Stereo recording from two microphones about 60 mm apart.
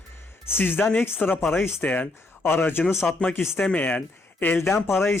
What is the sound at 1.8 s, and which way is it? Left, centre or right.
A man's voice, left.